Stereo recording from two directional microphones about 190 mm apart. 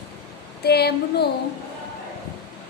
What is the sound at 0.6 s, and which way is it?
Speech, 60° left (ahead or behind).